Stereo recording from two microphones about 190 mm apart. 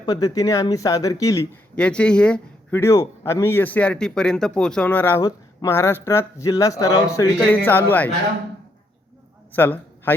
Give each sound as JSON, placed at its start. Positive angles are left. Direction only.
{"t": 0.0, "sound": "speech", "side_deg": 20}
{"t": 1.7, "sound": "speech", "side_deg": 5}
{"t": 9.5, "sound": "a man's voice", "side_deg": 10}